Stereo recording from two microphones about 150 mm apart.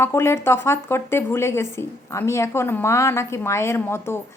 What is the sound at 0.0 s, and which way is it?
A woman's voice, 15° left (ahead or behind).